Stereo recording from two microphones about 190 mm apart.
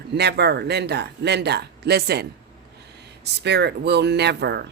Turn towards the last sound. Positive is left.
turn(degrees=-60)  # may be behind; listen again after turning